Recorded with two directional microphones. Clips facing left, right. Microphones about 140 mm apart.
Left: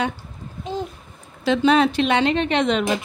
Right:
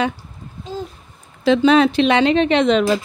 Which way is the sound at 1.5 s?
90° right.